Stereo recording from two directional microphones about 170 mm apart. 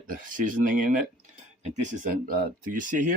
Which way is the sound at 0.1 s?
50° right (ahead or behind).